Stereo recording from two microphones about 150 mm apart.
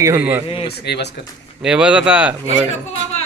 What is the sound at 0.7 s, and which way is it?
Speech, 90° left.